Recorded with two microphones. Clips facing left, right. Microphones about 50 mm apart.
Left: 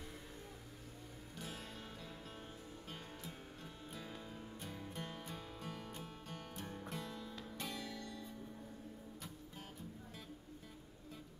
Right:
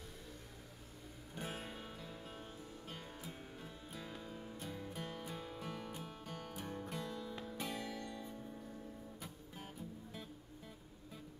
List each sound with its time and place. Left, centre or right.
1.3 s music: right
1.7 s music: centre
7.7 s music: centre